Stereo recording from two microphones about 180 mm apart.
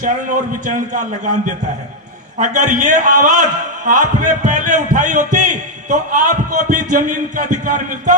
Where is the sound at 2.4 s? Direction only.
45° right (ahead or behind).